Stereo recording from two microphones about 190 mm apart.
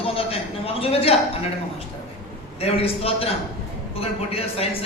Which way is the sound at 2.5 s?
30° left (ahead or behind).